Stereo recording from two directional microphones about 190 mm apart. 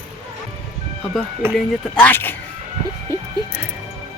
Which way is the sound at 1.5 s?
10° left (ahead or behind).